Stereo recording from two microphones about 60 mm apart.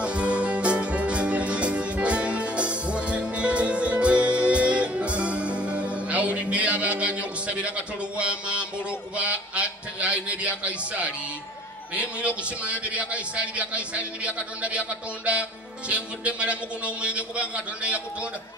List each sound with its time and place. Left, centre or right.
0.0 s music: centre
8.2 s a sound: right
12.0 s a man's voice: right